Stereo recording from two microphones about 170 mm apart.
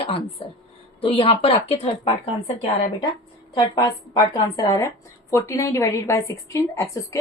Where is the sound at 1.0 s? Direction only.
35° left (ahead or behind).